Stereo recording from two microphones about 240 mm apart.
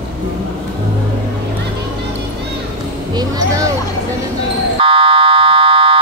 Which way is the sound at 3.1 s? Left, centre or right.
Centre.